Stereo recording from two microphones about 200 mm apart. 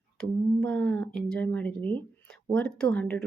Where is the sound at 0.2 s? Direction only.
5° left (ahead or behind).